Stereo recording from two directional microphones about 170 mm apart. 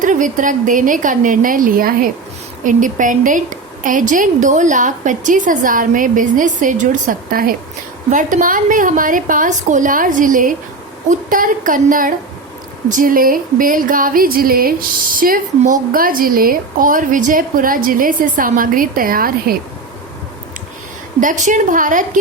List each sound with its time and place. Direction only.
0.0 s a woman's voice: 50° right (ahead or behind)
21.2 s a woman's voice: 50° right (ahead or behind)